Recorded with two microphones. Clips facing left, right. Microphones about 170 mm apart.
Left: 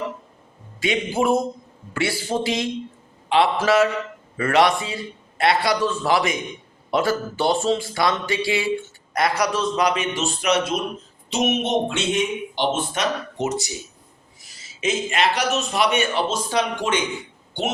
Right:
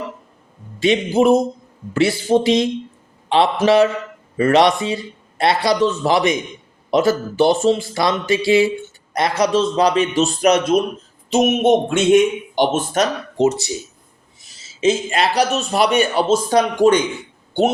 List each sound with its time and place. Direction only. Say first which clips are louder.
0.8 s a man's voice: right 7 dB; 25° right (ahead or behind)
14.8 s speech: right 5 dB; 30° right (ahead or behind)